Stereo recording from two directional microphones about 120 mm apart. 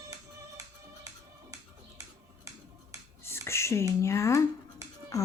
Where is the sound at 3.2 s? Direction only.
20° left (ahead or behind).